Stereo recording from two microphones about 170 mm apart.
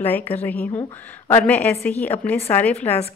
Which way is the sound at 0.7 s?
30° left (ahead or behind).